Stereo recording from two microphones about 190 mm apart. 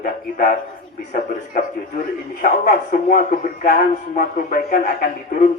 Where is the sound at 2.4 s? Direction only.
50° left (ahead or behind).